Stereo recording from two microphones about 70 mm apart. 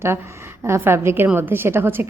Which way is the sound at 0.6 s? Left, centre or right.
Right.